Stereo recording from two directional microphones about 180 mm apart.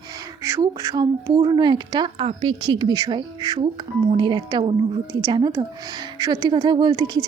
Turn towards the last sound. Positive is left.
turn(degrees=-20)  # may be behind; listen again after turning